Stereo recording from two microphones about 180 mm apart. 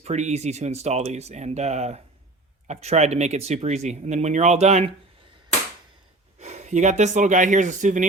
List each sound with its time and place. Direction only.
0.0 s speech: 40° right (ahead or behind)
6.4 s speech: 40° right (ahead or behind)